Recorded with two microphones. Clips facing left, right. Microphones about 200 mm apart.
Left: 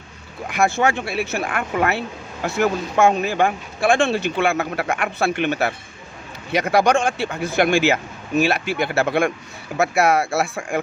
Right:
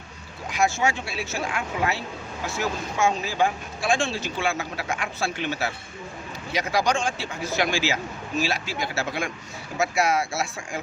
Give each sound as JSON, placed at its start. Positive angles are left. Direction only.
{"t": 0.5, "sound": "speech", "side_deg": 60}